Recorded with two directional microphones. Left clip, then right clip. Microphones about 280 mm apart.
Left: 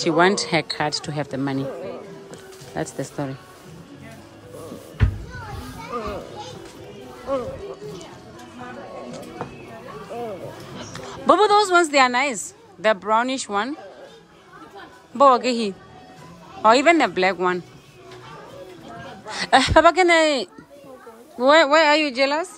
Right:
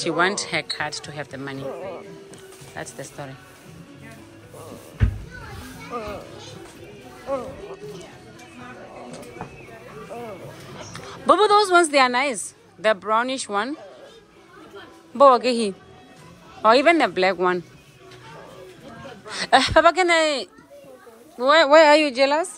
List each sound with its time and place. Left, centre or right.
0.0 s speech: centre
2.7 s speech: left
10.9 s speech: centre
15.1 s speech: centre
19.2 s a woman's voice: centre
21.6 s a woman's voice: centre